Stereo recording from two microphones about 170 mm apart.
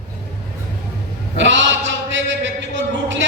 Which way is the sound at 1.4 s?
90° right.